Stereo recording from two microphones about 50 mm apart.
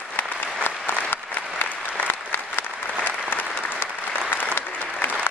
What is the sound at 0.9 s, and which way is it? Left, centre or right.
Applause, left.